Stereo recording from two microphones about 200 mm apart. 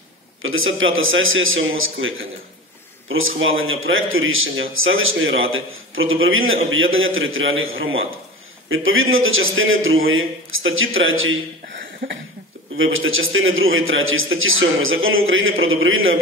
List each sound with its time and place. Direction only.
0.4 s a man's voice: 85° right
12.7 s a man's voice: 80° right